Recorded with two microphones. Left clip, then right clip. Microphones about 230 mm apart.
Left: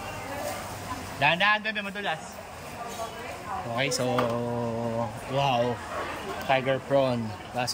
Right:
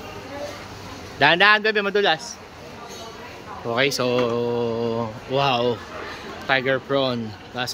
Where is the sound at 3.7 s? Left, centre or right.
Centre.